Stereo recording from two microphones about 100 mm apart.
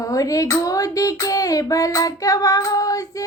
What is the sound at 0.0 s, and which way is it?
Child singing, 35° left (ahead or behind).